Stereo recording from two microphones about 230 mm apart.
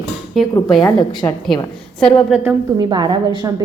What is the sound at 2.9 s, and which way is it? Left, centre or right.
Speech, centre.